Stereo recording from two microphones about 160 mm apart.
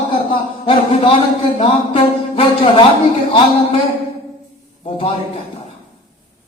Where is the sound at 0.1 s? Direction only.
35° left (ahead or behind).